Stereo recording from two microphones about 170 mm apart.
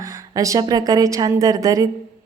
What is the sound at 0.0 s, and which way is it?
A woman's voice, 20° right (ahead or behind).